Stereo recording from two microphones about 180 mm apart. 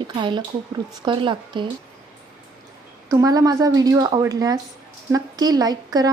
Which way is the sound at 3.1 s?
20° right (ahead or behind).